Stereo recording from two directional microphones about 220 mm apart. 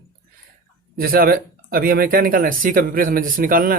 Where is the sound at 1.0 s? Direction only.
40° right (ahead or behind).